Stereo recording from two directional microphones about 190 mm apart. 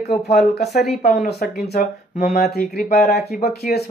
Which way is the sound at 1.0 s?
50° left (ahead or behind).